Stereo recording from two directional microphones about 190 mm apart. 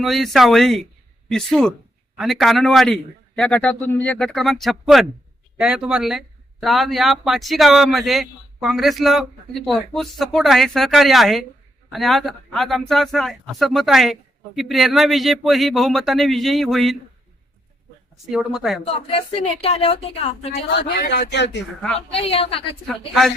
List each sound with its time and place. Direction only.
0.0 s speech: centre (ahead or behind)
18.3 s speech: centre (ahead or behind)
19.1 s a woman's voice: 30° left (ahead or behind)
20.7 s speech: 55° left (ahead or behind)
21.8 s speech: 5° left (ahead or behind)
22.1 s a woman's voice: 30° left (ahead or behind)
22.9 s speech: centre (ahead or behind)